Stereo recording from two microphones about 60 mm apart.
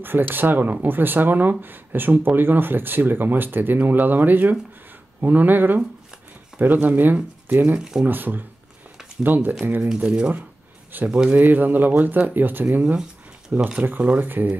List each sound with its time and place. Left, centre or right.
0.0 s speech: right
9.8 s speech: centre
11.3 s speech: right
13.5 s speech: centre
14.3 s speech: right